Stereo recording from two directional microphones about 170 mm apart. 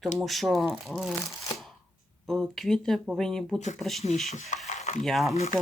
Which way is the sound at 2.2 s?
Centre (ahead or behind).